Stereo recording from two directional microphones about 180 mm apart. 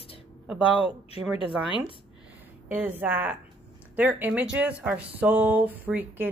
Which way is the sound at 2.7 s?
10° right (ahead or behind).